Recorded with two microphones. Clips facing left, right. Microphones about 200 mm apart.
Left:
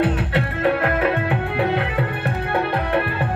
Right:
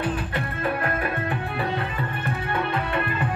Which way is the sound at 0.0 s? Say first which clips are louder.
Left 7 dB; 70° left (ahead or behind).